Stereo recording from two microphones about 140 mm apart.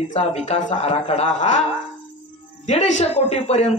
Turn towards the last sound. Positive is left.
turn(degrees=50)  # may be behind; listen again after turning